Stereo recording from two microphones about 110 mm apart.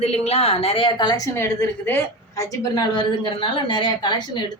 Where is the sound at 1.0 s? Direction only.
40° left (ahead or behind).